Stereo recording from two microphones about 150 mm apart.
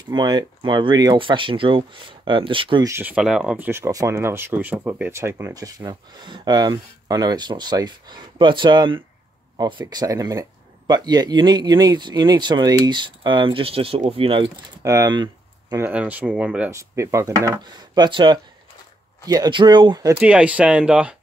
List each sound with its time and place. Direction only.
0.1 s speech: 30° right (ahead or behind)
2.8 s speech: 15° right (ahead or behind); by 14.5 s 40° right (ahead or behind)
14.8 s speech: 20° right (ahead or behind)
15.7 s speech: 10° right (ahead or behind)
16.7 s speech: 20° right (ahead or behind)
20.2 s speech: 10° right (ahead or behind)